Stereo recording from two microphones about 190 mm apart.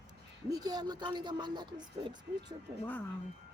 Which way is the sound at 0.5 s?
20° right (ahead or behind).